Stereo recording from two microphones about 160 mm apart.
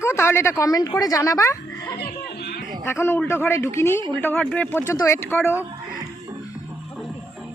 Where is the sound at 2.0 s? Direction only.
90° left.